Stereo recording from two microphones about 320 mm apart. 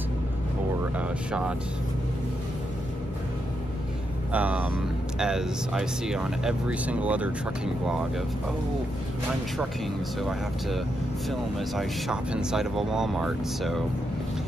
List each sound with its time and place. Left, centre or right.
0.9 s speech: centre
4.3 s speech: centre
11.2 s speech: centre